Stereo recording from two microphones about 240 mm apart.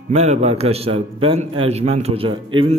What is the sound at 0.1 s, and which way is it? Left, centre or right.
A man's voice, right.